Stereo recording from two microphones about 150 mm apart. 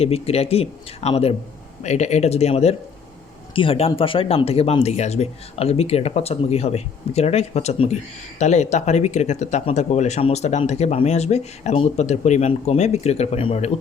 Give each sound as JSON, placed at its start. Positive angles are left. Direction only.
{"t": 0.0, "sound": "speech", "side_deg": 40}